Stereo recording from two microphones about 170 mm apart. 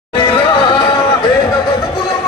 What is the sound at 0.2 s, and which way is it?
Chatter, 35° left (ahead or behind).